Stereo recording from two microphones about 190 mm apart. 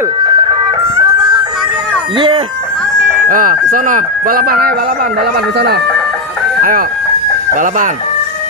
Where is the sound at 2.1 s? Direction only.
25° right (ahead or behind).